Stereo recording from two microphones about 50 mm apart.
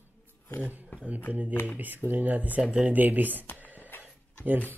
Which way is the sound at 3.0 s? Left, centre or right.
Right.